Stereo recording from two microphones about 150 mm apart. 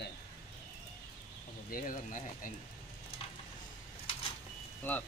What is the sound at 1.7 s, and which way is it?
Speech, 65° left (ahead or behind).